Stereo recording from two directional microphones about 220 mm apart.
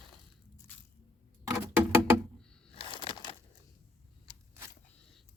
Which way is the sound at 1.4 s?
10° right (ahead or behind).